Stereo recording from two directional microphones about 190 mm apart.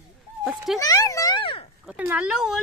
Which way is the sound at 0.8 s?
15° left (ahead or behind).